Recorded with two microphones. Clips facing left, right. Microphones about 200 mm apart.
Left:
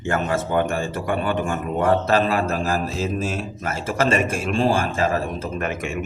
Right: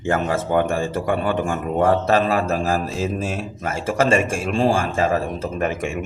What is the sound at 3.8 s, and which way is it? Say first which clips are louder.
A man's voice: right 2 dB; 30° right (ahead or behind).